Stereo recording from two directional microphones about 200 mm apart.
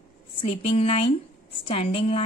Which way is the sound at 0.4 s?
30° left (ahead or behind).